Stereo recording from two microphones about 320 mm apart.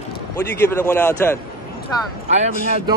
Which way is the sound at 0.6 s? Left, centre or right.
Centre.